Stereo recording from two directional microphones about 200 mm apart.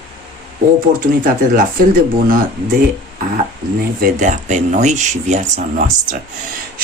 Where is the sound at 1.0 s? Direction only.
45° right (ahead or behind).